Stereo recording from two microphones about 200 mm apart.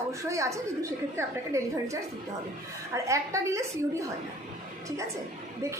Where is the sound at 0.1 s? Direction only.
15° right (ahead or behind).